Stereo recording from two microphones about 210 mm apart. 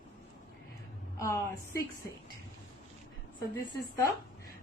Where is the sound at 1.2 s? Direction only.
15° left (ahead or behind).